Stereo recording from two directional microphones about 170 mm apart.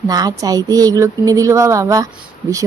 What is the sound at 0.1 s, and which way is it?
A woman's voice, 20° right (ahead or behind).